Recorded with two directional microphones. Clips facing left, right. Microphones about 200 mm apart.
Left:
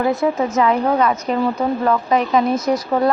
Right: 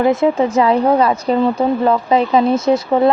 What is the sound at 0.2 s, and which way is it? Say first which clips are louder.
Speech: right 4 dB; 30° right (ahead or behind).